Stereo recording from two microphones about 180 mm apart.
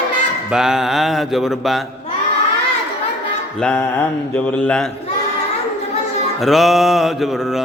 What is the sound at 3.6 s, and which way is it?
Music, 5° left (ahead or behind).